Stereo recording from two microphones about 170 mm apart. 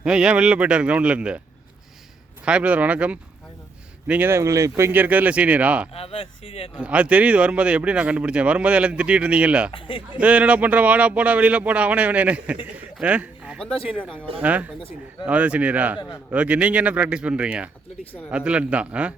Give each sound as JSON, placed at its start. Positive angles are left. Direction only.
{"t": 0.0, "sound": "speech", "side_deg": -5}
{"t": 2.4, "sound": "speech", "side_deg": -5}
{"t": 5.9, "sound": "speech", "side_deg": 35}
{"t": 6.7, "sound": "speech", "side_deg": -5}
{"t": 9.7, "sound": "speech", "side_deg": 30}
{"t": 10.2, "sound": "speech", "side_deg": -10}
{"t": 14.0, "sound": "speech", "side_deg": 10}
{"t": 14.3, "sound": "speech", "side_deg": -10}
{"t": 16.0, "sound": "speech", "side_deg": 20}
{"t": 16.3, "sound": "speech", "side_deg": -10}